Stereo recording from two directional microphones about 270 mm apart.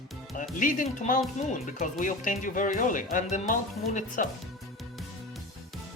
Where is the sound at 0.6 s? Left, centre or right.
Left.